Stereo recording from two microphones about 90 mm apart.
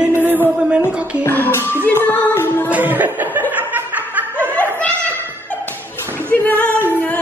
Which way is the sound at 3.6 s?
20° right (ahead or behind).